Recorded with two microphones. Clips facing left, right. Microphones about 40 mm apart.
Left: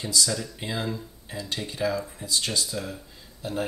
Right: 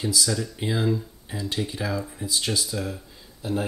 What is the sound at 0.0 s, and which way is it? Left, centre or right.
Speech, centre.